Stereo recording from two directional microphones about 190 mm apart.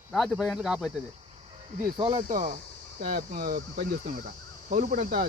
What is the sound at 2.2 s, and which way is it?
Speech, 45° right (ahead or behind).